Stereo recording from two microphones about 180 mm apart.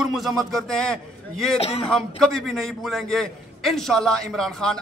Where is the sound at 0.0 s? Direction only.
Centre (ahead or behind).